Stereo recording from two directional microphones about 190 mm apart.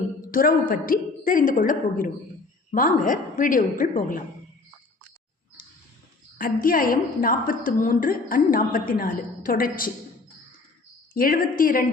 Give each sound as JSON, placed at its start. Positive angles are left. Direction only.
{"t": 0.3, "sound": "a woman's voice", "side_deg": 50}
{"t": 6.4, "sound": "a woman's voice", "side_deg": 45}
{"t": 11.1, "sound": "a woman's voice", "side_deg": 50}